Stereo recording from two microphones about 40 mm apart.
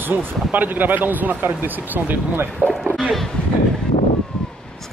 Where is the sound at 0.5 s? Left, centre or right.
Right.